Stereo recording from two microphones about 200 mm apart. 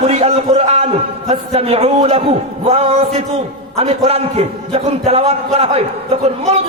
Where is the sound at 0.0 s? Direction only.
30° right (ahead or behind).